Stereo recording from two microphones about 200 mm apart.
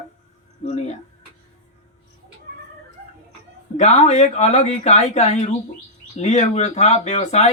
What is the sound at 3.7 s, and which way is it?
Speech, 35° left (ahead or behind).